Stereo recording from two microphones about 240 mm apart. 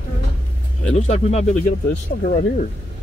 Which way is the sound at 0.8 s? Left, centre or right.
Left.